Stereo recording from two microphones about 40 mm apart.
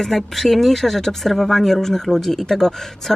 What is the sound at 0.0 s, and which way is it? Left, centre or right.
Speech, centre.